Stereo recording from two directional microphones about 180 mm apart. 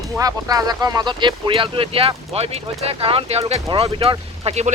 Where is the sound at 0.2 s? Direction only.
20° right (ahead or behind).